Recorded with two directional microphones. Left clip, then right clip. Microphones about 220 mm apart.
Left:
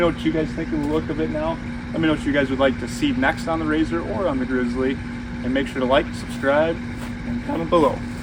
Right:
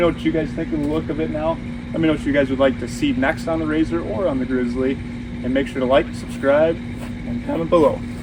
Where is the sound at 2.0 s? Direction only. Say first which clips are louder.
Right 2 dB; 15° left (ahead or behind).